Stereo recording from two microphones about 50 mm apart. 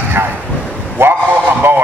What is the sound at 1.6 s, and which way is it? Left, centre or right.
Speech, right.